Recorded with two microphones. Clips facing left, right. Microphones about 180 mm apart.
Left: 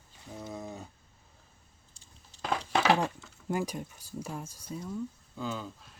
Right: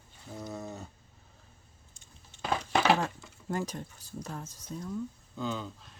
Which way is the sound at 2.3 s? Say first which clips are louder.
Even; 35° left (ahead or behind).